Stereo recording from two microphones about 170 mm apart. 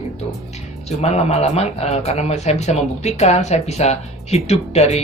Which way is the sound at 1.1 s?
40° left (ahead or behind).